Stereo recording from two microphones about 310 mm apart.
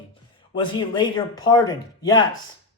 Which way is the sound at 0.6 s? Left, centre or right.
Centre.